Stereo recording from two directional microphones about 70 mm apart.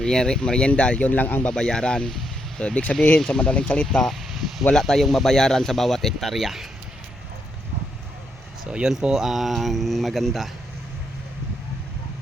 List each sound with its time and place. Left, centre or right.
0.0 s speech: centre; by 1.5 s left
1.5 s speech: centre
8.7 s speech: centre